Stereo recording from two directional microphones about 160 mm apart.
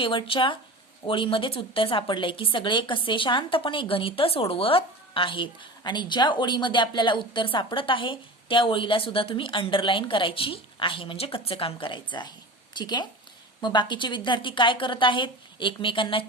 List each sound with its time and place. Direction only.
0.0 s a woman's voice: 30° left (ahead or behind)